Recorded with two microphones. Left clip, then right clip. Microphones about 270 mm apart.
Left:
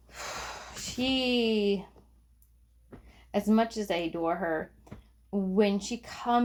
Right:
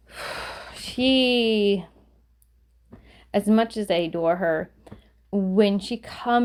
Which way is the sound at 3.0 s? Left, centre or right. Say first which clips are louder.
Right 6 dB; right.